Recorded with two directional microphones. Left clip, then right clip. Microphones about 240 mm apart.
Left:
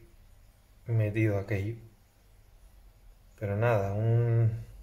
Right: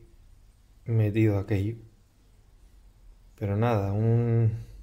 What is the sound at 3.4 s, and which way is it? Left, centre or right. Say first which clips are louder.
Speech: even; right.